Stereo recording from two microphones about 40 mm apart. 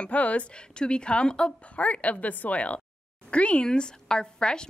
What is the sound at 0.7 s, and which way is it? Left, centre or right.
Speech, left.